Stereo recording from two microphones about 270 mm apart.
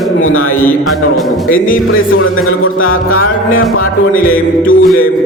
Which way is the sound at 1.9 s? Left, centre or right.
Left.